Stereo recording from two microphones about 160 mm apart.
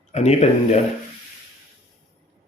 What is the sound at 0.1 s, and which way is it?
Speech, 45° left (ahead or behind).